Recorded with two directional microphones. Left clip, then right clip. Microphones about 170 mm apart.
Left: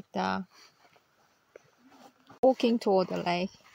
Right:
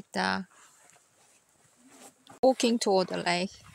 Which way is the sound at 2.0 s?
40° right (ahead or behind).